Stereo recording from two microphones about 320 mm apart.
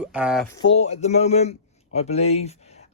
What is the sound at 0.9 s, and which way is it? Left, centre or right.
A man's voice, left.